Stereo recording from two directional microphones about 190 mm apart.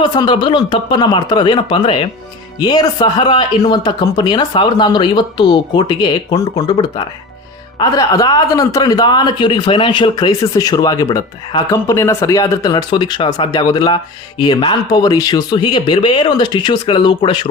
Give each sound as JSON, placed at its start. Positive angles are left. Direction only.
{"t": 0.0, "sound": "speech", "side_deg": 20}